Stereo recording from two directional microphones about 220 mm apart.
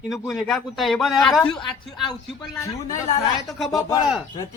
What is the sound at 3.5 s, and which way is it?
Speech, centre (ahead or behind).